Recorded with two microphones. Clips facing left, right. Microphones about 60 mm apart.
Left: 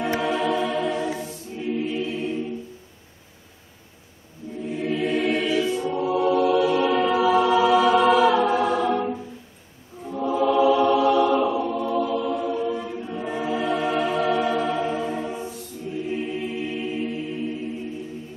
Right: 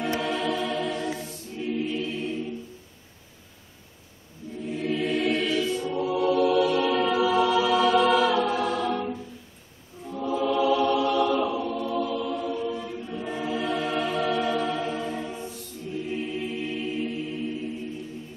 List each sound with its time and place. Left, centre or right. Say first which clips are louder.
0.2 s choir: left 4 dB; centre
4.6 s music: left 2 dB; centre
10.0 s choir: left 4 dB; centre
10.6 s music: left 5 dB; centre